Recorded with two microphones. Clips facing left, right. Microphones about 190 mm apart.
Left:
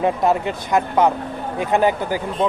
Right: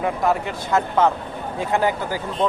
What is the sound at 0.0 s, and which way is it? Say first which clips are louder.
Speech: left 3 dB; 20° left (ahead or behind).